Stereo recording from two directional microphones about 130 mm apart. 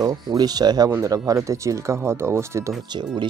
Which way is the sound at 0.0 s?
30° right (ahead or behind).